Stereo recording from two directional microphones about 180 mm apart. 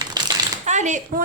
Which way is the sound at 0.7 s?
40° right (ahead or behind).